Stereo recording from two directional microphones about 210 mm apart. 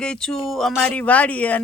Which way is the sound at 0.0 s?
5° left (ahead or behind).